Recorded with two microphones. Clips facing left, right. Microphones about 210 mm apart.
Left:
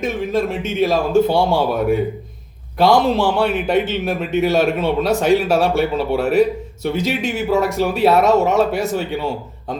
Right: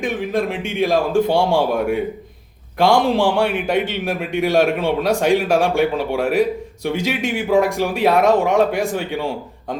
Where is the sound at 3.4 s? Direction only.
10° right (ahead or behind).